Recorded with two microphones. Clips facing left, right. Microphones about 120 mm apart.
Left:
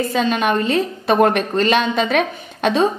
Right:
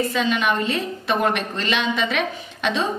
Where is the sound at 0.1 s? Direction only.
45° left (ahead or behind).